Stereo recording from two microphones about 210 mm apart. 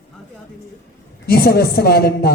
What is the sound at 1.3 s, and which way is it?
A woman's voice, 50° left (ahead or behind).